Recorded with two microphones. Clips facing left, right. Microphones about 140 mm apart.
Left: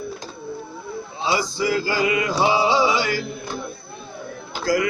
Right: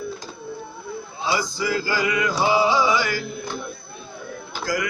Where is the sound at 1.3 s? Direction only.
25° left (ahead or behind).